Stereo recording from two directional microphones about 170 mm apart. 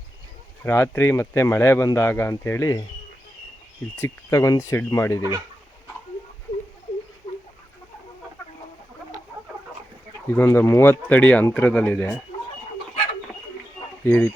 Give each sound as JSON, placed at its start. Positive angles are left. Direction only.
{"t": 0.6, "sound": "speech", "side_deg": 15}
{"t": 3.9, "sound": "speech", "side_deg": 15}
{"t": 10.2, "sound": "speech", "side_deg": 15}
{"t": 14.0, "sound": "speech", "side_deg": 10}